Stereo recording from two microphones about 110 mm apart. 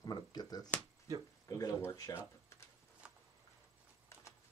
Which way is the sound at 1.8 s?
20° left (ahead or behind).